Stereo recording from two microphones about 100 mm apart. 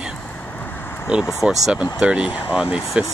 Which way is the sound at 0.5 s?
20° left (ahead or behind).